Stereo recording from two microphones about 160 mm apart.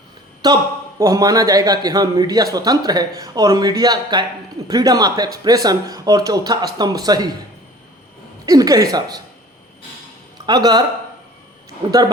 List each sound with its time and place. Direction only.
0.9 s a man's voice: 20° right (ahead or behind)
8.4 s a man's voice: 20° right (ahead or behind)
10.4 s speech: 25° right (ahead or behind)